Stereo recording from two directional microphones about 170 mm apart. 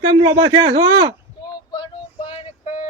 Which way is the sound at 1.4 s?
25° left (ahead or behind).